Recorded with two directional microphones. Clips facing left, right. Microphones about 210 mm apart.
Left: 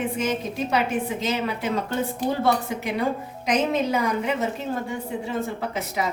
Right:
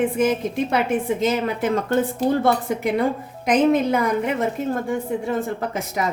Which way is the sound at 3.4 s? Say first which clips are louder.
Right 5 dB; 55° right (ahead or behind).